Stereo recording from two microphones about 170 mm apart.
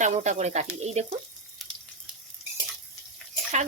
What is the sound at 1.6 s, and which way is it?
Water tap, centre (ahead or behind).